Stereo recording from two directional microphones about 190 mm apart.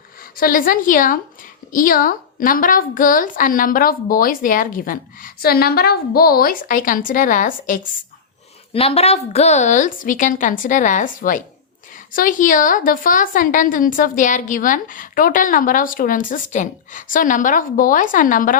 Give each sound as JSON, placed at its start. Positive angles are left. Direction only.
{"t": 0.2, "sound": "a woman's voice", "side_deg": 50}
{"t": 8.7, "sound": "a woman's voice", "side_deg": 30}